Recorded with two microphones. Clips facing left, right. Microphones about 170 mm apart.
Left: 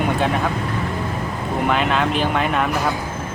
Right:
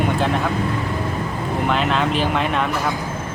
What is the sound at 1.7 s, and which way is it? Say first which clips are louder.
Speech: even; centre (ahead or behind).